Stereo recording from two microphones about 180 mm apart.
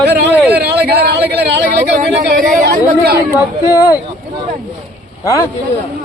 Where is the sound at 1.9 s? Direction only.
50° right (ahead or behind).